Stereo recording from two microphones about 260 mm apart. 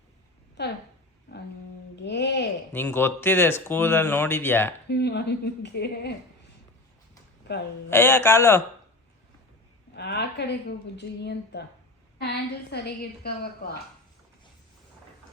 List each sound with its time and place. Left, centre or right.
0.6 s a woman's voice: left
1.3 s humming: left
2.0 s a sound: left
2.7 s speech: centre
4.9 s a woman's voice: left
7.9 s speech: centre
9.9 s a woman's voice: left